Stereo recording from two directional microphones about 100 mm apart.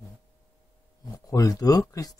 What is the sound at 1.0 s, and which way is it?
Speech, 35° left (ahead or behind).